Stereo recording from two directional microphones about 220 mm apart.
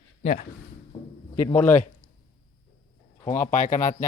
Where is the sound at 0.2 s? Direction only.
35° left (ahead or behind).